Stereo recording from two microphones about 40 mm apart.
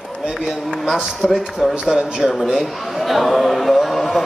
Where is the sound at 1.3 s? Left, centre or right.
Centre.